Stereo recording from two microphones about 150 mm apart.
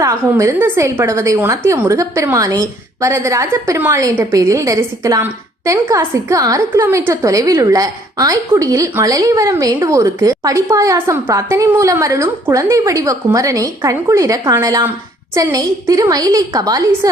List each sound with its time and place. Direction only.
0.0 s a woman's voice: 20° right (ahead or behind)